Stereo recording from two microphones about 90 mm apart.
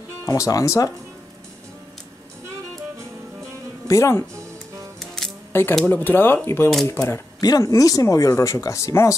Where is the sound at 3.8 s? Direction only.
35° left (ahead or behind).